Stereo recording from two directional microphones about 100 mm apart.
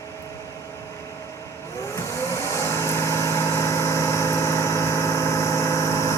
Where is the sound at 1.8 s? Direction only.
30° left (ahead or behind).